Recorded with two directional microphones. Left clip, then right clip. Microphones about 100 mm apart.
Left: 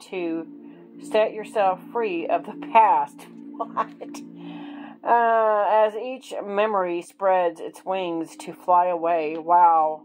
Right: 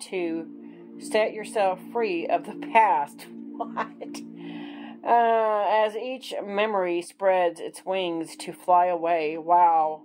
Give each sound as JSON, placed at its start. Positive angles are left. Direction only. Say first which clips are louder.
{"t": 0.1, "sound": "speech", "louder": "left 1 dB", "side_deg": 15}
{"t": 1.0, "sound": "music", "louder": "left 3 dB", "side_deg": 20}